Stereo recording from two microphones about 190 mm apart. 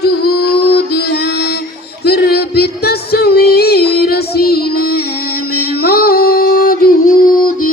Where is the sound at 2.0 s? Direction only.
55° left (ahead or behind).